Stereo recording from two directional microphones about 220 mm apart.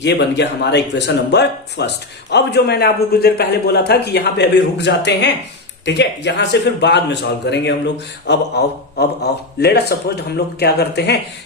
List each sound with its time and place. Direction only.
0.0 s a man's voice: 50° left (ahead or behind)